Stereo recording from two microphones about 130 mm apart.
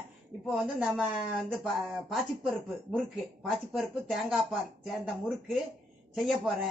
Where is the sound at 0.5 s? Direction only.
10° right (ahead or behind).